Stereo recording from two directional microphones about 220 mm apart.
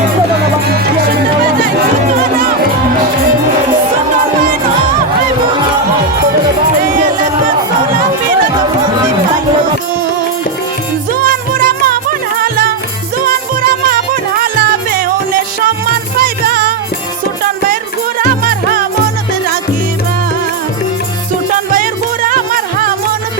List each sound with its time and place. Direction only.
11.2 s music: 40° right (ahead or behind)
13.8 s music: 40° right (ahead or behind)
16.1 s music: 40° right (ahead or behind)
18.2 s music: 40° right (ahead or behind)
22.3 s music: 40° right (ahead or behind)